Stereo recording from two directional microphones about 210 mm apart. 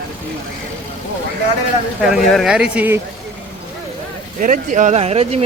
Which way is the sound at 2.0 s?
Centre (ahead or behind).